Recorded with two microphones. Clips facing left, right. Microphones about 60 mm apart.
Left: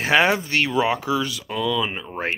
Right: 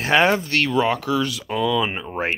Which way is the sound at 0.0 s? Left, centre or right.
Centre.